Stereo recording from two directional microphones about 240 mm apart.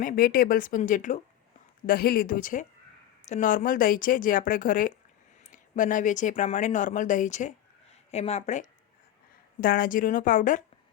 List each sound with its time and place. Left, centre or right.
0.0 s speech: left